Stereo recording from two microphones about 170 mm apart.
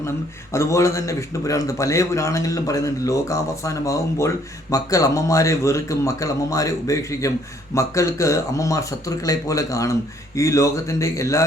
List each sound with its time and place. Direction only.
0.5 s a man's voice: 15° left (ahead or behind)